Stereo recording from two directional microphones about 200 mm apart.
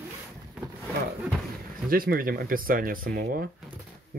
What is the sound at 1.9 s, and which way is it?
Speech, 45° right (ahead or behind).